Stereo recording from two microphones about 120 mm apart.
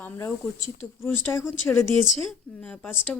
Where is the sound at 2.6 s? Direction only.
5° left (ahead or behind).